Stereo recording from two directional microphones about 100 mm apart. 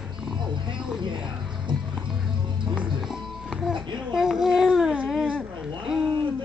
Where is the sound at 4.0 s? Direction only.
5° right (ahead or behind).